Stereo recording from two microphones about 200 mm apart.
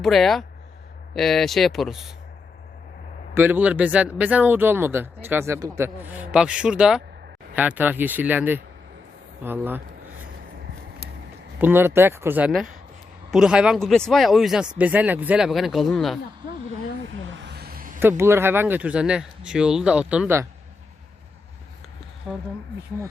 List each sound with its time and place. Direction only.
0.0 s speech: centre (ahead or behind)
3.3 s speech: 10° right (ahead or behind)
11.6 s speech: 10° right (ahead or behind)
17.1 s vehicle: 70° right (ahead or behind); by 18.0 s 45° right (ahead or behind)
18.0 s speech: 10° right (ahead or behind)
22.3 s speech: 5° right (ahead or behind)